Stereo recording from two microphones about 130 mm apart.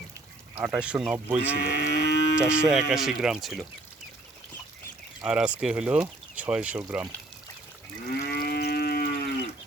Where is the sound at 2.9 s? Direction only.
5° right (ahead or behind).